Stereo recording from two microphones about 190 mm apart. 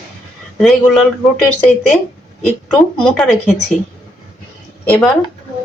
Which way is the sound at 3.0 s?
5° left (ahead or behind).